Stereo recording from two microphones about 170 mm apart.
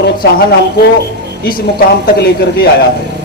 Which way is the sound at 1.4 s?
60° left (ahead or behind).